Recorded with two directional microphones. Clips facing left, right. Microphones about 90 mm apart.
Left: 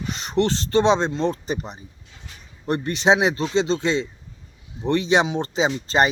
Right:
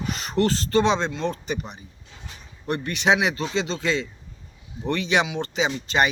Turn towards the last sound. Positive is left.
turn(degrees=30)  # may be behind; listen again after turning